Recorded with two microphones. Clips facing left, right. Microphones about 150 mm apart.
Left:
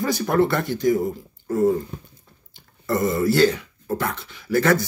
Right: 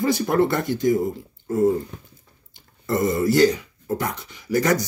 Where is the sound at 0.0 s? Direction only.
20° right (ahead or behind).